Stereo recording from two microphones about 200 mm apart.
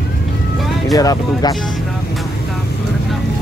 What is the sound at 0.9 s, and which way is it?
Speech, 20° left (ahead or behind).